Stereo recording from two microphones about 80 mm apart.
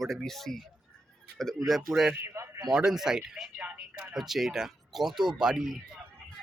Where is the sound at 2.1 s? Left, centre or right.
Right.